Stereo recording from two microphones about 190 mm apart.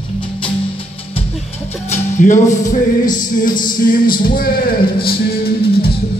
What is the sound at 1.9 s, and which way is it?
Music, 40° left (ahead or behind).